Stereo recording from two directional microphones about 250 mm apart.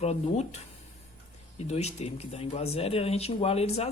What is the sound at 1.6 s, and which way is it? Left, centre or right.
Speech, left.